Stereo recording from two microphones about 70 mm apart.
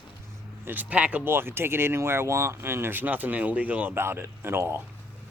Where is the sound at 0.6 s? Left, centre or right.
Right.